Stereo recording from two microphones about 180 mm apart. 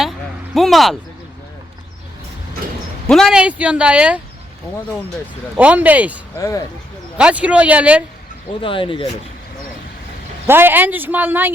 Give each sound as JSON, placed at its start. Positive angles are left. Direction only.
{"t": 0.5, "sound": "speech", "side_deg": 0}
{"t": 3.1, "sound": "speech", "side_deg": 0}
{"t": 5.5, "sound": "speech", "side_deg": -10}
{"t": 6.3, "sound": "speech", "side_deg": 20}
{"t": 7.2, "sound": "speech", "side_deg": -5}
{"t": 8.6, "sound": "speech", "side_deg": 30}
{"t": 10.4, "sound": "speech", "side_deg": -10}